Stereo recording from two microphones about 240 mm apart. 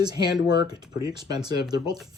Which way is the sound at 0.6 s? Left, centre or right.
Centre.